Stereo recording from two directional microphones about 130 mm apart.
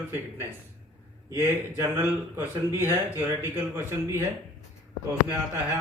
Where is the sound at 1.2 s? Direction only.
20° right (ahead or behind).